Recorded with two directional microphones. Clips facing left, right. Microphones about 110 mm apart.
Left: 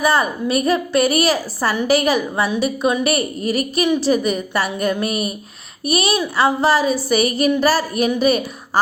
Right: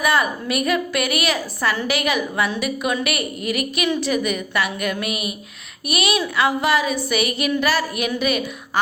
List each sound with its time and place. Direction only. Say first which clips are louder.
0.0 s a woman's voice: left 3 dB; 30° left (ahead or behind)